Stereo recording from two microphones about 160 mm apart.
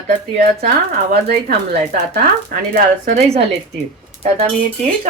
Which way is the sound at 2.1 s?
65° right (ahead or behind).